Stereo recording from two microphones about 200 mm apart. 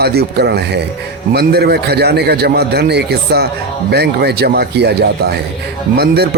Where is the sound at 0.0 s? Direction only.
50° right (ahead or behind).